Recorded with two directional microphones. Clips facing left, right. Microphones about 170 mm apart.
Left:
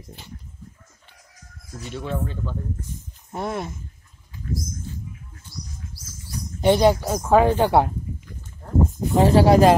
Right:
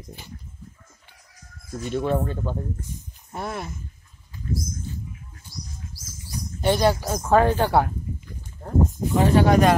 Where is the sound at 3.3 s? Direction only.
20° left (ahead or behind).